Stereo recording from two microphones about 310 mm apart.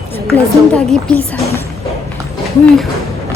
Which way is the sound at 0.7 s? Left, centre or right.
Centre.